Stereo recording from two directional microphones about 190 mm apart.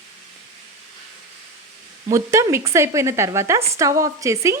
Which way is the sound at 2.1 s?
15° right (ahead or behind).